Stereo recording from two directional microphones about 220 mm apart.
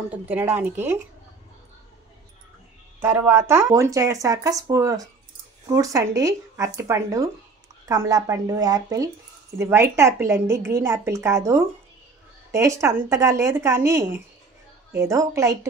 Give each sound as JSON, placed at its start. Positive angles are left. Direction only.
{"t": 0.1, "sound": "speech", "side_deg": -10}
{"t": 3.0, "sound": "speech", "side_deg": -10}